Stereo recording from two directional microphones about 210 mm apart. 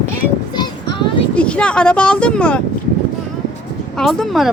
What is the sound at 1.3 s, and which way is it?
A woman's voice, 5° left (ahead or behind).